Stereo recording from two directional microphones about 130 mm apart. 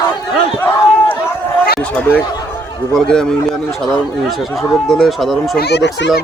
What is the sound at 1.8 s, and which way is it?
Chatter, 10° left (ahead or behind).